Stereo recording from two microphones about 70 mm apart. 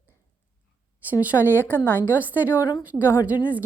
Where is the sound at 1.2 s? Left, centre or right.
Right.